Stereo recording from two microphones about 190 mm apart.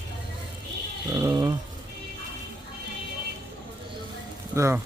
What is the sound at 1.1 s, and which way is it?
Speech, 20° right (ahead or behind).